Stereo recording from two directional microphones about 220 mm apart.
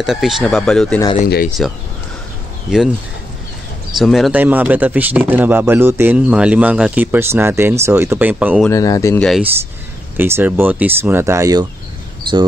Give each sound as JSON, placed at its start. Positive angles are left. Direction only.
{"t": 0.0, "sound": "speech", "side_deg": 0}
{"t": 1.2, "sound": "speech", "side_deg": 40}
{"t": 4.0, "sound": "a man's voice", "side_deg": 0}
{"t": 8.6, "sound": "speech", "side_deg": 15}
{"t": 9.2, "sound": "speech", "side_deg": 0}
{"t": 10.1, "sound": "a man's voice", "side_deg": -10}